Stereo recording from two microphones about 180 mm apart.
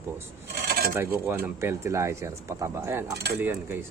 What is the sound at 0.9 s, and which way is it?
Speech, 10° right (ahead or behind).